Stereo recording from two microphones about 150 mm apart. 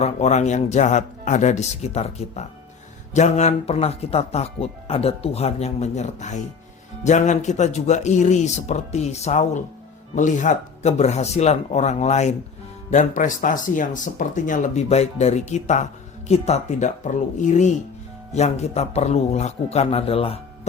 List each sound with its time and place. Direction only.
0.0 s speech: 50° left (ahead or behind)